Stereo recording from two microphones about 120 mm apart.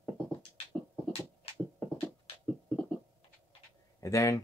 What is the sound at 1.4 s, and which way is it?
Beatboxing, 55° left (ahead or behind).